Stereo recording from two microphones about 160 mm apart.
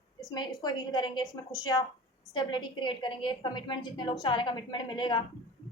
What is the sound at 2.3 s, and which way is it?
A woman's voice, 25° left (ahead or behind).